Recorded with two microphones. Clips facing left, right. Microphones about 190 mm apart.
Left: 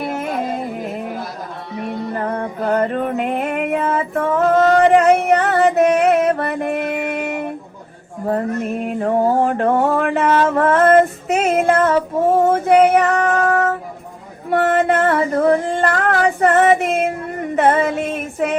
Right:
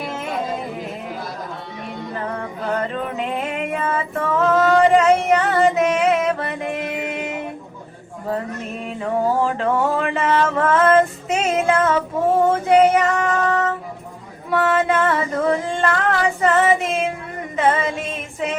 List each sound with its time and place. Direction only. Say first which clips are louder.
0.0 s music: left 5 dB; 55° left (ahead or behind)
1.9 s music: left 5 dB; 50° left (ahead or behind)
4.4 s a sound: left 2 dB; 40° left (ahead or behind)
4.8 s a sound: left 2 dB; 55° left (ahead or behind)
8.3 s mantra: left 6 dB; 55° left (ahead or behind)
9.9 s female singing: left 3 dB; 55° left (ahead or behind)
14.5 s music: left 3 dB; 55° left (ahead or behind)
15.4 s a sound: left 4 dB; 55° left (ahead or behind)
15.8 s child singing: left 3 dB; 45° left (ahead or behind)
17.5 s female singing: left 4 dB; 60° left (ahead or behind)